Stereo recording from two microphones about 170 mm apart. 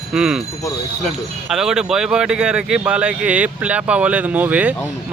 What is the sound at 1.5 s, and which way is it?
Speech, 5° right (ahead or behind).